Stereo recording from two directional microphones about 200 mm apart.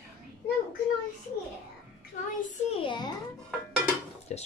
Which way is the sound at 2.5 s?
25° left (ahead or behind).